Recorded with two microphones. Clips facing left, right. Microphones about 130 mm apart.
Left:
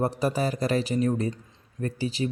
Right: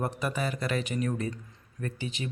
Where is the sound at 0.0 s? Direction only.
35° left (ahead or behind).